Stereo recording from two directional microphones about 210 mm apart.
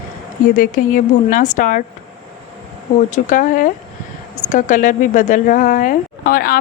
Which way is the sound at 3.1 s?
35° left (ahead or behind).